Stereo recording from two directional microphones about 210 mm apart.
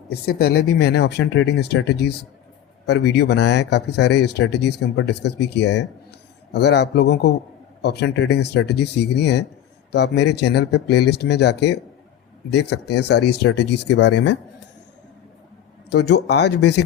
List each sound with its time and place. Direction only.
0.1 s speech: 45° left (ahead or behind)
13.8 s speech: 75° left (ahead or behind); by 14.3 s 55° left (ahead or behind)
15.9 s speech: 55° left (ahead or behind)